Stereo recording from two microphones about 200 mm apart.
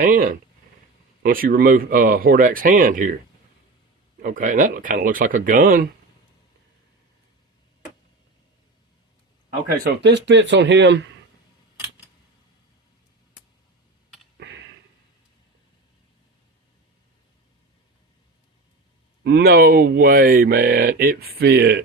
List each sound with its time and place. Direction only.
0.0 s speech: 45° right (ahead or behind)
4.2 s speech: 40° right (ahead or behind)
9.8 s speech: 60° right (ahead or behind)
14.3 s a sound: 60° right (ahead or behind)
19.2 s speech: 50° right (ahead or behind)